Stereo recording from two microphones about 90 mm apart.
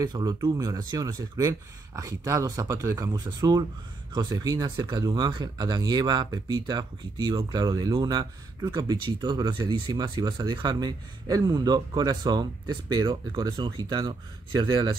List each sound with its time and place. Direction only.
0.0 s speech: 50° right (ahead or behind)